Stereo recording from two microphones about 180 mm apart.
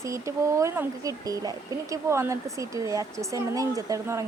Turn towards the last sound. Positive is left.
turn(degrees=-15)  # may be behind; listen again after turning